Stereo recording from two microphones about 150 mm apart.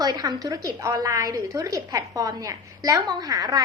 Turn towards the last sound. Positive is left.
turn(degrees=-25)  # may be behind; listen again after turning